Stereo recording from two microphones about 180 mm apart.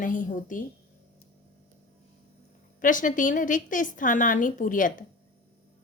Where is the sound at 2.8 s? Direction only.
45° left (ahead or behind).